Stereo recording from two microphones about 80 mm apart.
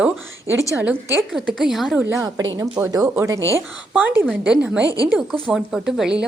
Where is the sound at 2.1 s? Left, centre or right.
Right.